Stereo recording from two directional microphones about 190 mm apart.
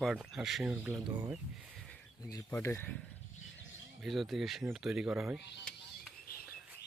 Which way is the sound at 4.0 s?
Centre (ahead or behind).